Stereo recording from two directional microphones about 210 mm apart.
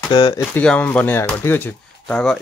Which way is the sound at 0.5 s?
5° left (ahead or behind).